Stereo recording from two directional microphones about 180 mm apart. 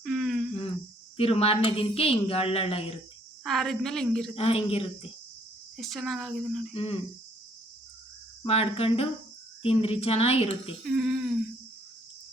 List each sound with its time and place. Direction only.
0.0 s a sound: centre (ahead or behind)
1.1 s speech: 30° left (ahead or behind)
3.4 s a woman's voice: centre (ahead or behind)
4.4 s speech: 30° left (ahead or behind)
5.7 s a woman's voice: centre (ahead or behind)
6.7 s speech: 30° left (ahead or behind)
8.4 s speech: 35° left (ahead or behind)
10.8 s a woman's voice: 5° right (ahead or behind)